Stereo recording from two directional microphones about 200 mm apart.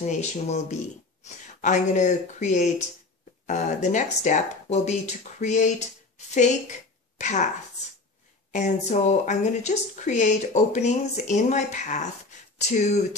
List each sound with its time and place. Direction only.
0.0 s speech: 35° left (ahead or behind)
7.2 s speech: 35° left (ahead or behind)
8.5 s speech: 35° left (ahead or behind)